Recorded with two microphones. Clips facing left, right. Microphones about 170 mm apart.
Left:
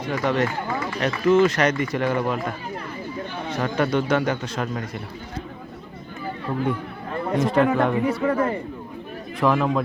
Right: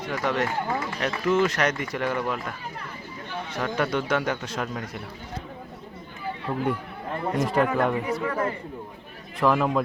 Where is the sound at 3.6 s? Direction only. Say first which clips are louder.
Left 4 dB; 5° right (ahead or behind).